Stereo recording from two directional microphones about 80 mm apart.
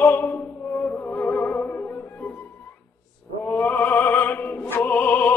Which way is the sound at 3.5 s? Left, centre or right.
Left.